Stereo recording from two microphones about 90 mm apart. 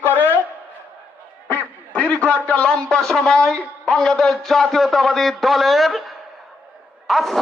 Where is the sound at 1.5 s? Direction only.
15° left (ahead or behind).